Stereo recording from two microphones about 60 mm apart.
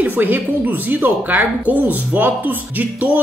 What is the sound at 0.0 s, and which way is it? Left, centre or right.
Speech, right.